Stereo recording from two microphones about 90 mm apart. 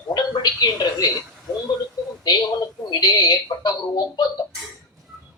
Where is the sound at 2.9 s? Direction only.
50° left (ahead or behind).